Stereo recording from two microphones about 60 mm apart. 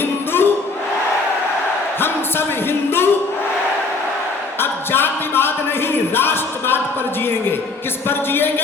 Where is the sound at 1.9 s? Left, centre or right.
Left.